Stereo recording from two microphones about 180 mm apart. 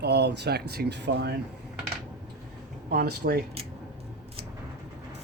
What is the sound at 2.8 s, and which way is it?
Speech, 60° right (ahead or behind).